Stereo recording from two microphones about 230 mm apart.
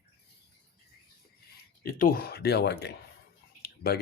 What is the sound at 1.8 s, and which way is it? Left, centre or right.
Speech, left.